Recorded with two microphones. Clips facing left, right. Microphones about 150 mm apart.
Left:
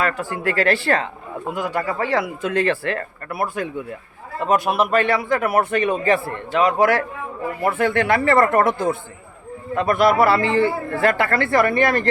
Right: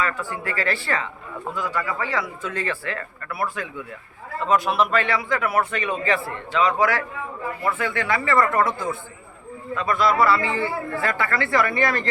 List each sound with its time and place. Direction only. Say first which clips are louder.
0.0 s speech: left 4 dB; 75° left (ahead or behind)
1.8 s speech: left 4 dB; 30° left (ahead or behind)
2.0 s speech: left 6 dB; 70° left (ahead or behind)
3.3 s speech: left 4 dB; 55° left (ahead or behind)